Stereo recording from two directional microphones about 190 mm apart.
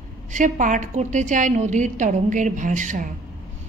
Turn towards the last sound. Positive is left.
turn(degrees=-45)  # may be behind; listen again after turning